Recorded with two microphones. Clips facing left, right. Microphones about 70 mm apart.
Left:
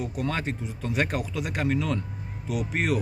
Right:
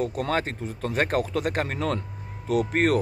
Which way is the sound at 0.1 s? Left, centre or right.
Right.